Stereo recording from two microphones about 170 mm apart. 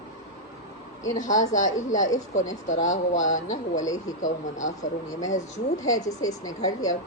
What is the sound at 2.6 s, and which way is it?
Speech, 45° left (ahead or behind).